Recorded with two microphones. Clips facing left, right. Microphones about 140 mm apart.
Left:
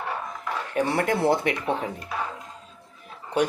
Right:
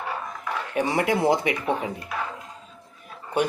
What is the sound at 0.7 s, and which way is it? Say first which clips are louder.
Speech: right 1 dB; 5° right (ahead or behind).